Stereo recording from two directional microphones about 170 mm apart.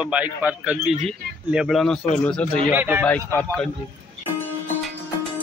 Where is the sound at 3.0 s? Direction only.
10° left (ahead or behind).